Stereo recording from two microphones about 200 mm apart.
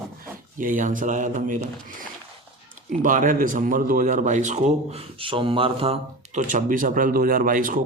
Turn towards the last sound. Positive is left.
turn(degrees=-45)  # may be behind; listen again after turning